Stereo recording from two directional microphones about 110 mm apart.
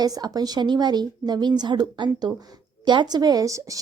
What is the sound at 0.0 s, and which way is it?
Speech, 35° right (ahead or behind).